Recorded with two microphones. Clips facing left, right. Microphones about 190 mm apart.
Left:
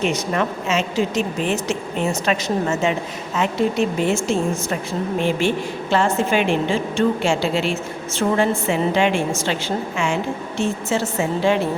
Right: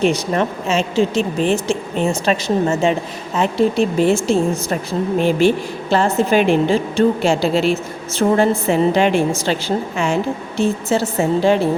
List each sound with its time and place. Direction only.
0.0 s a woman's voice: 35° right (ahead or behind)